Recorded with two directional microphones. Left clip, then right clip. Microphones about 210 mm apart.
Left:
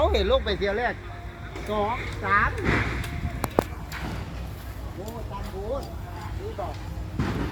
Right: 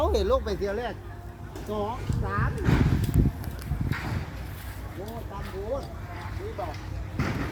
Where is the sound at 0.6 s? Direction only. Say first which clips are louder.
Left 5 dB; 30° right (ahead or behind).